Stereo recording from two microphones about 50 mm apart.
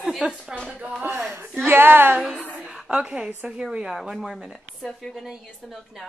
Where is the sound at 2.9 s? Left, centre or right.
Right.